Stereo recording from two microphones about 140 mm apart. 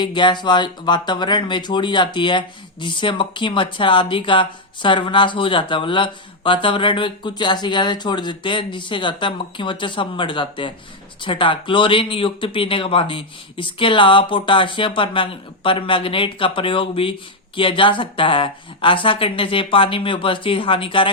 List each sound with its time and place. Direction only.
0.0 s speech: 35° left (ahead or behind)